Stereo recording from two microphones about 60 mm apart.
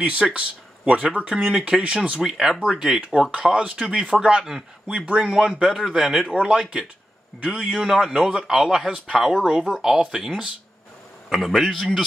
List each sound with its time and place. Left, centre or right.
0.0 s speech: right
2.2 s speech: centre
6.2 s speech: centre
7.7 s speech: centre
11.2 s a man's voice: centre